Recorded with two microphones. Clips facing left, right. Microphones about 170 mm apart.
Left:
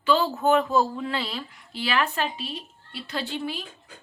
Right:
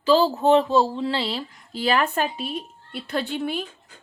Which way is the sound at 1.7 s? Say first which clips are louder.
Right 4 dB; 45° right (ahead or behind).